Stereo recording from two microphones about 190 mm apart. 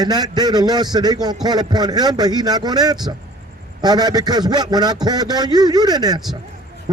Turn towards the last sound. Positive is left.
turn(degrees=-20)  # may be behind; listen again after turning